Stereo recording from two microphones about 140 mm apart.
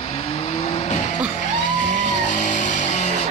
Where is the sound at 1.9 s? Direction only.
60° left (ahead or behind).